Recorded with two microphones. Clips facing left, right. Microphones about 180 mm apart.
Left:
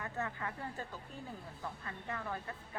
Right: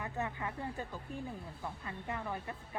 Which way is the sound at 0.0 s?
20° right (ahead or behind).